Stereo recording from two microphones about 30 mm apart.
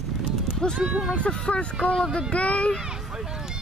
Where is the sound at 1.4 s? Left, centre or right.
Left.